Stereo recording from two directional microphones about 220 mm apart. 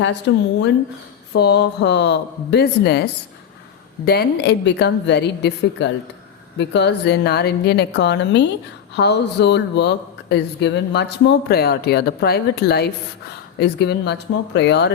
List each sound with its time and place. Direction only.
1.4 s speech: 50° left (ahead or behind)
4.0 s speech: 45° left (ahead or behind)